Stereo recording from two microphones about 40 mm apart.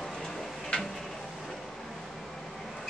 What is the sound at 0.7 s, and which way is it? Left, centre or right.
Tick-tock, left.